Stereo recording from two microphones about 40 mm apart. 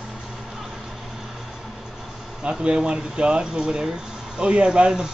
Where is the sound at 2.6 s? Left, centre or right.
Centre.